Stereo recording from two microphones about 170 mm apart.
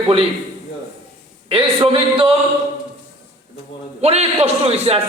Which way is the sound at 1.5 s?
30° right (ahead or behind).